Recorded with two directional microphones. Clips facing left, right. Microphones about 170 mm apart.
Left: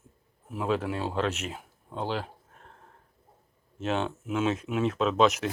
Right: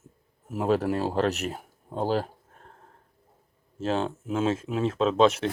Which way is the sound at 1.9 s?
40° right (ahead or behind).